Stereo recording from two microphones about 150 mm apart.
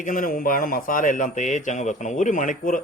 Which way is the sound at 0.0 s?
65° left (ahead or behind).